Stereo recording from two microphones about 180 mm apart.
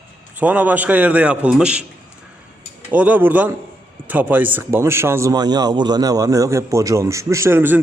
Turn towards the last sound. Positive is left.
turn(degrees=-10)  # may be behind; listen again after turning